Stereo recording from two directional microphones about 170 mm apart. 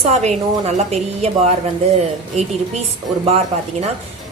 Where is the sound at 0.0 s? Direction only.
40° right (ahead or behind).